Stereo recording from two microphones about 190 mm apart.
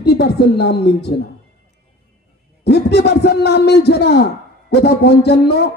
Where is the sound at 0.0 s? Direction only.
60° left (ahead or behind).